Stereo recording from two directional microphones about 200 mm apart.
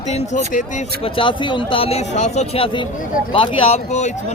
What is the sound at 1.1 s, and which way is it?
Speech, 25° left (ahead or behind).